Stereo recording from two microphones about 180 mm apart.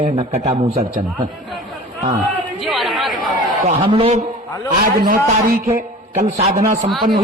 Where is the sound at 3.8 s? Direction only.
30° right (ahead or behind).